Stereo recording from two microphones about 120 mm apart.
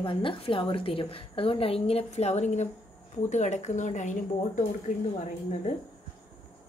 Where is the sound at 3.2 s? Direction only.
85° left.